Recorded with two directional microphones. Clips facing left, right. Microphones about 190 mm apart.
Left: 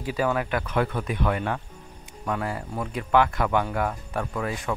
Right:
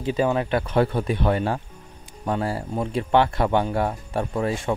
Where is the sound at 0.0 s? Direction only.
25° right (ahead or behind).